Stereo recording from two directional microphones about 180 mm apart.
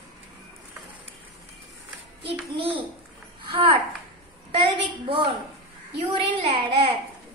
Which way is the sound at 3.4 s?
30° right (ahead or behind).